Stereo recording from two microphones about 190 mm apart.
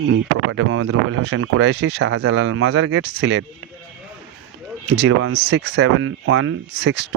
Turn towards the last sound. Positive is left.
turn(degrees=-65)  # may be behind; listen again after turning